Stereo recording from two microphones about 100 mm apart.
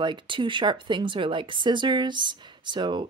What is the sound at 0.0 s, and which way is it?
Speech, 50° right (ahead or behind).